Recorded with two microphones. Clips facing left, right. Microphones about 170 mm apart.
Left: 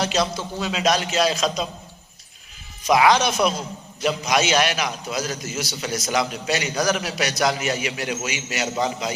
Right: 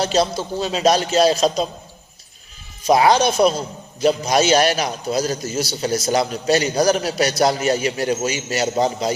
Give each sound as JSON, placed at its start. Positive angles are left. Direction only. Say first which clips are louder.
{"t": 0.0, "sound": "a man's voice", "louder": "right 4 dB", "side_deg": -30}
{"t": 2.8, "sound": "a man's voice", "louder": "right 3 dB", "side_deg": -30}